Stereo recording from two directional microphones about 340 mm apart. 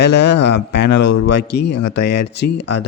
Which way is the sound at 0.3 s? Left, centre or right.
Left.